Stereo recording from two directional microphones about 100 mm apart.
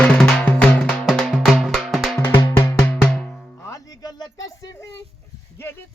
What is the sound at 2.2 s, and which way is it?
Music, 25° left (ahead or behind).